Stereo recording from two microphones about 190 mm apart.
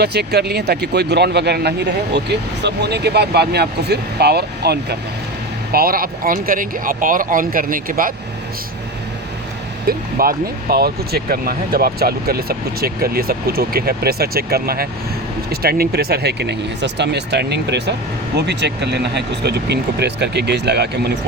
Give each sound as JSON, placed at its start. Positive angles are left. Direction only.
{"t": 0.0, "sound": "speech", "side_deg": -60}
{"t": 9.8, "sound": "speech", "side_deg": -50}